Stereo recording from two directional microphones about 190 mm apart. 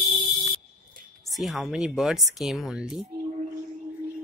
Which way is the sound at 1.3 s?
Centre (ahead or behind).